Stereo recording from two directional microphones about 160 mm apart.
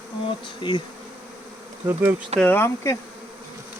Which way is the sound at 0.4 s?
30° left (ahead or behind).